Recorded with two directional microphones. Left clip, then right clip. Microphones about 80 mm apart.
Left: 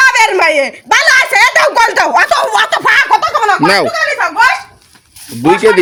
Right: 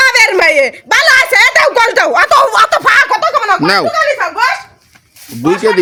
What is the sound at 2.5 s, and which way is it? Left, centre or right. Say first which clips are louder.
Speech: right 1 dB; right.